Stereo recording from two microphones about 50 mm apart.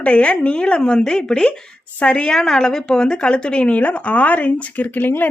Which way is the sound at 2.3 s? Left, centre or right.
Centre.